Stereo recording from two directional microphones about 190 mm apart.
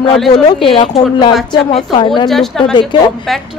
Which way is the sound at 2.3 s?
Centre (ahead or behind).